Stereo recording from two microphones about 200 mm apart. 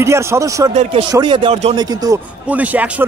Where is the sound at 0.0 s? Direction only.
15° right (ahead or behind).